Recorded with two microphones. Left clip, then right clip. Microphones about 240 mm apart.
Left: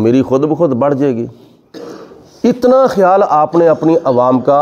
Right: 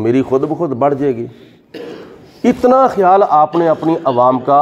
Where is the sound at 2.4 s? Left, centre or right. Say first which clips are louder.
Left 1 dB; left.